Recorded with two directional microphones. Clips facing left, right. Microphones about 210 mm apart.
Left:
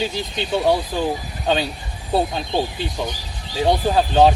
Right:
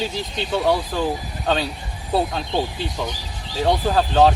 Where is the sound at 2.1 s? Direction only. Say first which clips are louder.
Left 1 dB; centre (ahead or behind).